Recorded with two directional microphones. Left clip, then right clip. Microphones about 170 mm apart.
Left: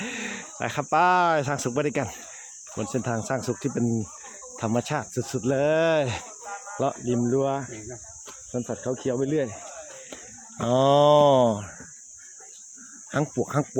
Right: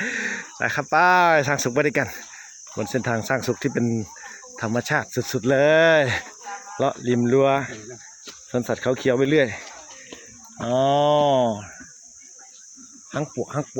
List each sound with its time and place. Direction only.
0.0 s speech: centre (ahead or behind)
6.5 s cricket: 5° right (ahead or behind)
7.3 s speech: 20° right (ahead or behind)
10.6 s mantra: 25° left (ahead or behind)
13.1 s speech: 35° left (ahead or behind)